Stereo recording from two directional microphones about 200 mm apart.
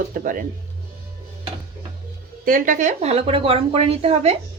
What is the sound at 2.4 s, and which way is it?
A woman's voice, 45° right (ahead or behind).